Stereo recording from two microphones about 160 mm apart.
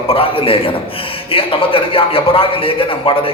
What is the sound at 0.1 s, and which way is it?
Speech, 35° left (ahead or behind).